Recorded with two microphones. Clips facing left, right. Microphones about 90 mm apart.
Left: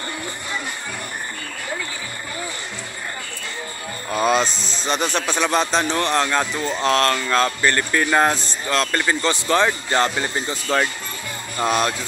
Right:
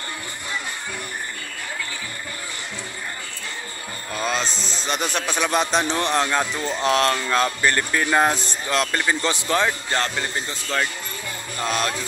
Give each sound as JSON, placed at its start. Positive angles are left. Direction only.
{"t": 4.3, "sound": "speech", "side_deg": 5}
{"t": 6.4, "sound": "speech", "side_deg": 5}
{"t": 6.8, "sound": "speech", "side_deg": -15}